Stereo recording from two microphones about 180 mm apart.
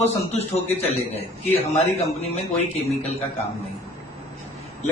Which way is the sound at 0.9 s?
35° left (ahead or behind).